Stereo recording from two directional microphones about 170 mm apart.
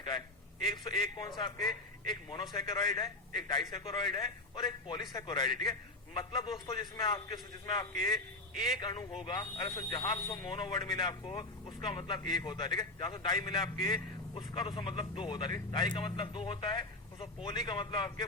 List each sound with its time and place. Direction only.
0.6 s a man's voice: 30° left (ahead or behind)